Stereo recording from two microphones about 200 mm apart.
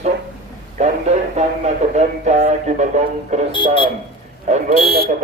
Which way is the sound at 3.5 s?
25° left (ahead or behind).